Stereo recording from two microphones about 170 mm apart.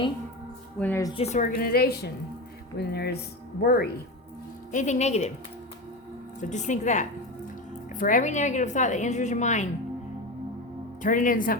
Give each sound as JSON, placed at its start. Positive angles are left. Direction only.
{"t": 0.8, "sound": "a woman's voice", "side_deg": 10}
{"t": 1.2, "sound": "a woman's voice", "side_deg": 45}
{"t": 4.7, "sound": "speech", "side_deg": 45}
{"t": 6.5, "sound": "a woman's voice", "side_deg": 45}
{"t": 11.0, "sound": "a woman's voice", "side_deg": 50}